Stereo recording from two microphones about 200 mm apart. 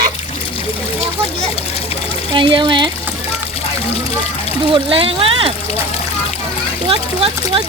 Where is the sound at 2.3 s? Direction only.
25° right (ahead or behind).